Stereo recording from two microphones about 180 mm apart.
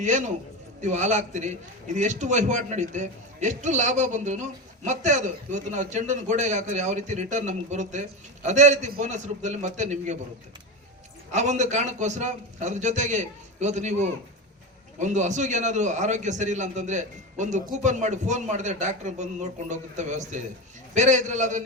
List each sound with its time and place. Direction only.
0.0 s a man's voice: 45° right (ahead or behind)
11.3 s a man's voice: 40° right (ahead or behind)